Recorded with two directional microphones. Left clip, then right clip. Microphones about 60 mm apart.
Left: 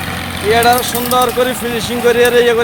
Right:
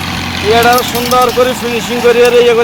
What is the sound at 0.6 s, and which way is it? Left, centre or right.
Speech, left.